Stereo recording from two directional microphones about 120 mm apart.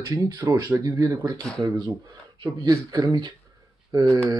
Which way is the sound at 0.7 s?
25° right (ahead or behind).